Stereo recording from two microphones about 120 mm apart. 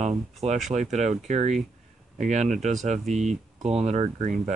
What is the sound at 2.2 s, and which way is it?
Speech, 90° right.